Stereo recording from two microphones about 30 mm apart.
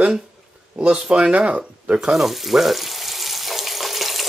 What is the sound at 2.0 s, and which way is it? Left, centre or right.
Frying, centre.